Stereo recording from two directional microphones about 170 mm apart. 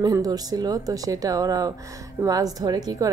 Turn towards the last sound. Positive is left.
turn(degrees=-20)  # may be behind; listen again after turning